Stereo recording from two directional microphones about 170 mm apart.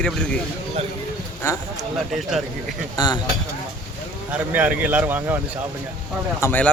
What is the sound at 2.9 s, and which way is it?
Speech, 25° left (ahead or behind).